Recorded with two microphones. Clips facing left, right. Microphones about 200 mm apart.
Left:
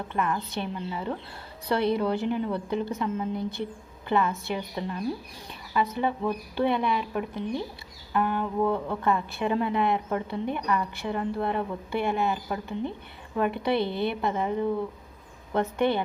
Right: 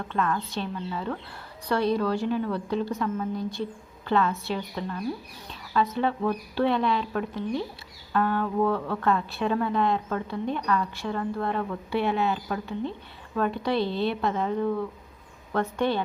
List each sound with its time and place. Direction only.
0.1 s a woman's voice: 15° left (ahead or behind)
5.5 s a sound: 15° left (ahead or behind)
6.0 s a woman's voice: 10° left (ahead or behind)